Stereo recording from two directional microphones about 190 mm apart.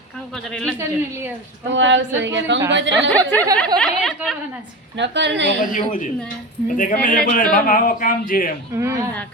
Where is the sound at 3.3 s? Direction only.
10° left (ahead or behind).